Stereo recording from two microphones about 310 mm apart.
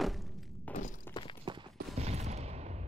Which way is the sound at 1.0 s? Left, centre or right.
Centre.